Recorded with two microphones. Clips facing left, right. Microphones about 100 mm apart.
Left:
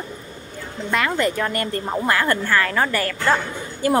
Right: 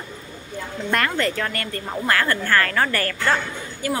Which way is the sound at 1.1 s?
15° left (ahead or behind).